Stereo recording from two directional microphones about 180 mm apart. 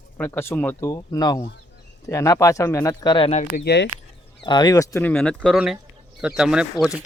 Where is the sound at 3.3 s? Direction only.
40° left (ahead or behind).